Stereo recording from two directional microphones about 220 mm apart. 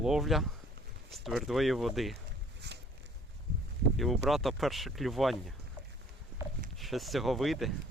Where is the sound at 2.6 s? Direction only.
50° right (ahead or behind).